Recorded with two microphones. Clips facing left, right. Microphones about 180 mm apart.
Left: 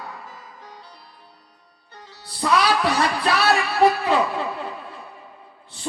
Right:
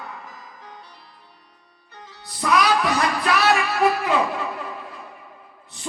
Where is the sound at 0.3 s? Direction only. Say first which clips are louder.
Even; 30° left (ahead or behind).